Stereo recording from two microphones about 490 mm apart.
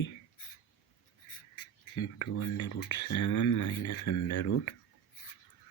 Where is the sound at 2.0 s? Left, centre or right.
Left.